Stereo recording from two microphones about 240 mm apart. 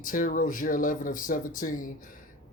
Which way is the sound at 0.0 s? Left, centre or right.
Left.